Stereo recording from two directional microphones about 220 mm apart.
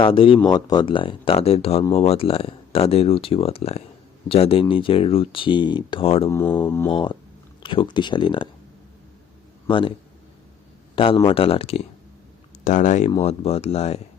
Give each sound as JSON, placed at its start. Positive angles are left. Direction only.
{"t": 0.0, "sound": "speech", "side_deg": 25}
{"t": 6.3, "sound": "a sound", "side_deg": 10}
{"t": 7.6, "sound": "speech", "side_deg": 20}
{"t": 9.6, "sound": "a man's voice", "side_deg": 20}
{"t": 10.9, "sound": "a man's voice", "side_deg": 25}